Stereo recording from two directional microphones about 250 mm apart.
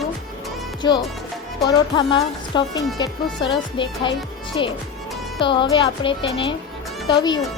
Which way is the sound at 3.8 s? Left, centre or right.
Centre.